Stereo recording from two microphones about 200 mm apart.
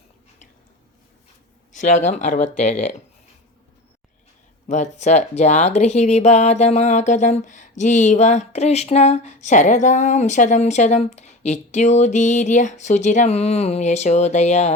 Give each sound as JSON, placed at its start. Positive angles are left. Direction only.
{"t": 1.8, "sound": "speech", "side_deg": 35}
{"t": 4.7, "sound": "speech", "side_deg": 35}